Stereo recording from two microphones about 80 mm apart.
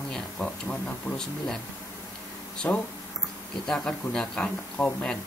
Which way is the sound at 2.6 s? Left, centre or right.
Left.